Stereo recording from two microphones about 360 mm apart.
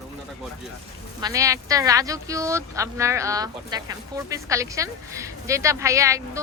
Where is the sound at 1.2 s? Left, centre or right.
Centre.